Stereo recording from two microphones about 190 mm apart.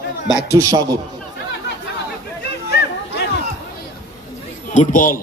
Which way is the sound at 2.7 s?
60° left (ahead or behind).